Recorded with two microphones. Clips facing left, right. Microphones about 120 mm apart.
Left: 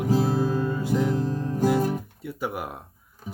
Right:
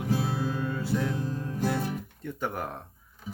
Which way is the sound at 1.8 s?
45° left (ahead or behind).